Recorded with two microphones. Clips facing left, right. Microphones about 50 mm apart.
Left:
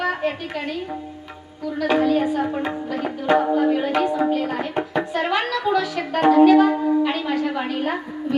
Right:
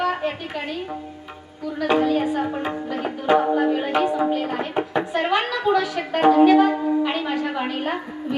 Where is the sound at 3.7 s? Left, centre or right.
Centre.